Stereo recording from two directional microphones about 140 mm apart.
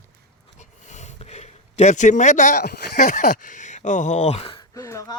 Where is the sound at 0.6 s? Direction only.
55° left (ahead or behind).